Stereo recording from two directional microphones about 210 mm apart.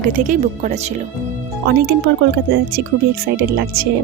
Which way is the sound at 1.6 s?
55° right (ahead or behind).